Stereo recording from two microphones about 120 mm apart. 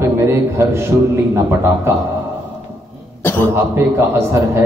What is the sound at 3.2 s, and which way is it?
Cough, 20° left (ahead or behind).